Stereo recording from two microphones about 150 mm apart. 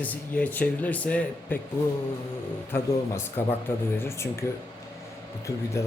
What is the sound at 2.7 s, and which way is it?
Speech, 15° left (ahead or behind).